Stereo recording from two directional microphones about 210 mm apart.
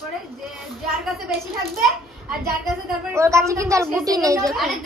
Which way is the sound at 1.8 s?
Centre (ahead or behind).